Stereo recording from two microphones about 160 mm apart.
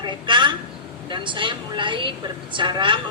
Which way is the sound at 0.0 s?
30° right (ahead or behind).